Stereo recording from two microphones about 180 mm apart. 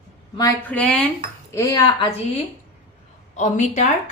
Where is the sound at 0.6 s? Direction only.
5° left (ahead or behind).